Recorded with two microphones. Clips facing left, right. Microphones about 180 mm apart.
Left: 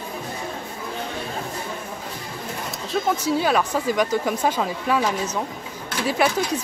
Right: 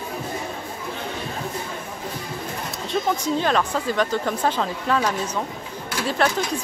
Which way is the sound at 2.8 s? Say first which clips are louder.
Left 1 dB; 5° left (ahead or behind).